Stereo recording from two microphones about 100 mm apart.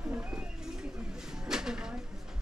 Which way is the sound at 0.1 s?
15° right (ahead or behind).